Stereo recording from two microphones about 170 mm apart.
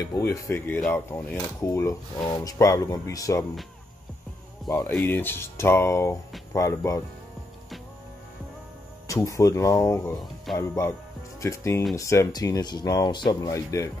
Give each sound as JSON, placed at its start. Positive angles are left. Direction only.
{"t": 0.0, "sound": "speech", "side_deg": 20}
{"t": 4.6, "sound": "speech", "side_deg": 20}
{"t": 9.0, "sound": "speech", "side_deg": 20}
{"t": 10.5, "sound": "speech", "side_deg": 0}
{"t": 10.8, "sound": "speech", "side_deg": 15}